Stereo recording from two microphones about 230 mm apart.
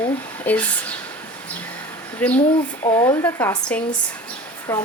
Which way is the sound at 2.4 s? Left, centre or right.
Left.